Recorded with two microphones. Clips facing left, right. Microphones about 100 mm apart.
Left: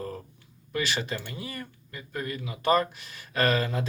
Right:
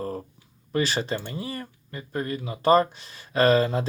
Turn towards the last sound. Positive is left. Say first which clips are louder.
# right 6 dB
turn(degrees=-25)  # may be behind; listen again after turning